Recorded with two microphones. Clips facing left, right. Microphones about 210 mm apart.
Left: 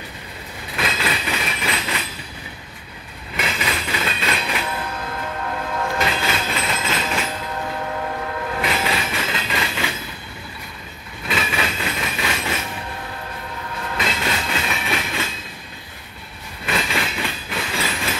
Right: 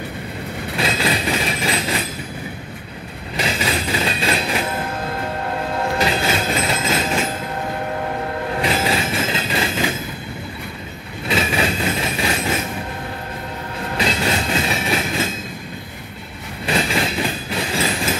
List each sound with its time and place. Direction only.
0.7 s train: 30° right (ahead or behind)
3.3 s train: 35° right (ahead or behind)
5.8 s train: 35° right (ahead or behind)
8.5 s train: 30° right (ahead or behind)
11.2 s train: 30° right (ahead or behind)
13.9 s train: 30° right (ahead or behind)
16.6 s train: 35° right (ahead or behind)